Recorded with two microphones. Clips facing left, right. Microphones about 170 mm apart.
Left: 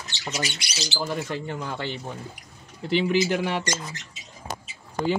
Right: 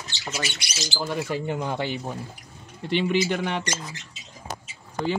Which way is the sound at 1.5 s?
15° right (ahead or behind).